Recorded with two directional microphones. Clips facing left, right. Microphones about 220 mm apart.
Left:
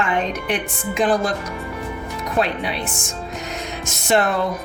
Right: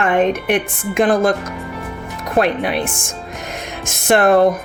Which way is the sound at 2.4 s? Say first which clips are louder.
Right 6 dB; 55° right (ahead or behind).